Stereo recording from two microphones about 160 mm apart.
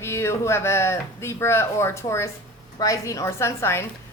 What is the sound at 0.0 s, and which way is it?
Speech, 15° left (ahead or behind).